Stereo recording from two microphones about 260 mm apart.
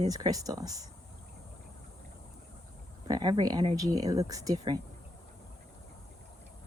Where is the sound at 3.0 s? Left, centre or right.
Centre.